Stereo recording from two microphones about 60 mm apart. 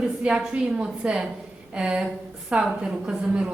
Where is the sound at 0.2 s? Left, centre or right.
Centre.